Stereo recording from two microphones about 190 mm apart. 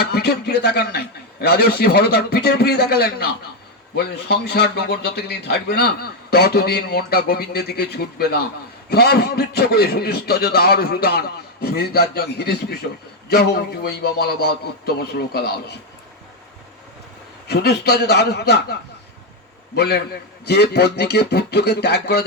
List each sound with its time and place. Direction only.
0.0 s a man's voice: 60° left (ahead or behind)
17.5 s a man's voice: 60° left (ahead or behind)